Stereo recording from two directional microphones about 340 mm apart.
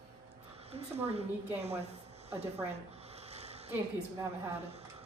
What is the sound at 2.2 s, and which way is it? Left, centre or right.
Speech, centre.